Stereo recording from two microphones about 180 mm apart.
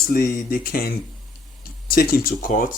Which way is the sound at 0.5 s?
55° left (ahead or behind).